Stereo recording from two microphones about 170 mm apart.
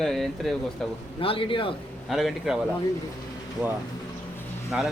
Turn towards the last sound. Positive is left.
turn(degrees=-5)  # may be behind; listen again after turning